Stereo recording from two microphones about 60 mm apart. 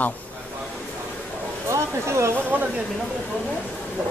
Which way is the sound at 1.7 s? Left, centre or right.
Right.